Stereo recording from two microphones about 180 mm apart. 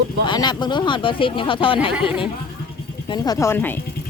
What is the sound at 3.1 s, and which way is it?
Speech, 20° left (ahead or behind).